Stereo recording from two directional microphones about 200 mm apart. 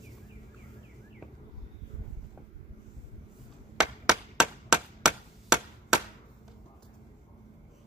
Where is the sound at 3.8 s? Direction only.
5° right (ahead or behind).